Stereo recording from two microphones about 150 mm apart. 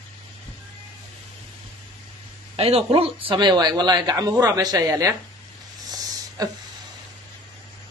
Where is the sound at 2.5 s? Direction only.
40° right (ahead or behind); by 5.1 s 20° right (ahead or behind).